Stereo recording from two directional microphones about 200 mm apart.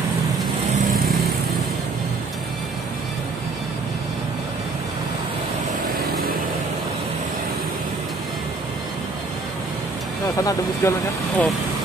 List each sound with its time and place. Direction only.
10.2 s speech: 15° left (ahead or behind)